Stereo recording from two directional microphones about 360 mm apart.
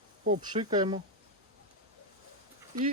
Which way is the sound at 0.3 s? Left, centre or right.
Centre.